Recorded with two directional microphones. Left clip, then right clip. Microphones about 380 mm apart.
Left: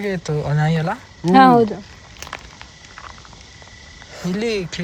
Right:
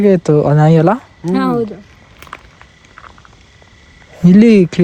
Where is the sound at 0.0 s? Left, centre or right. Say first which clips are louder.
Right 13 dB; centre.